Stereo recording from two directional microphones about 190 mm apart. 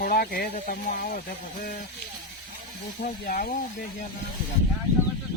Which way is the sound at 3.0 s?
50° left (ahead or behind).